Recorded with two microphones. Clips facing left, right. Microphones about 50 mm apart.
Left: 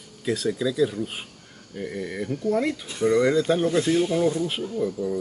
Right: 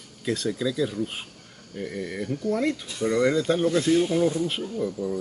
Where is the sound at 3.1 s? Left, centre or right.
Centre.